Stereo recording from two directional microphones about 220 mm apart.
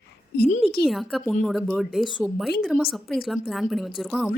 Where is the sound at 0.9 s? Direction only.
Centre (ahead or behind).